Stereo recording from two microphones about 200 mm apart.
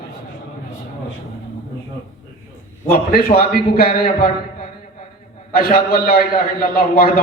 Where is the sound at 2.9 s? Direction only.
45° left (ahead or behind).